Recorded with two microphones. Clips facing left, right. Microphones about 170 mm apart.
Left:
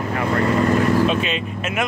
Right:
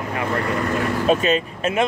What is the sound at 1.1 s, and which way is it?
Speech, 40° right (ahead or behind).